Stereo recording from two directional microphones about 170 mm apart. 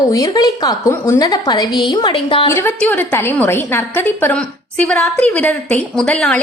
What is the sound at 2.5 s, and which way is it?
A woman's voice, 15° left (ahead or behind).